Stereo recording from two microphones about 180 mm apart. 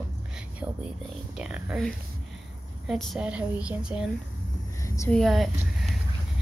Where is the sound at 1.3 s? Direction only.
5° right (ahead or behind).